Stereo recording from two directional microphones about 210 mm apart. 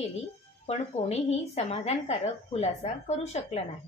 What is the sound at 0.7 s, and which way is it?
A woman's voice, 30° left (ahead or behind).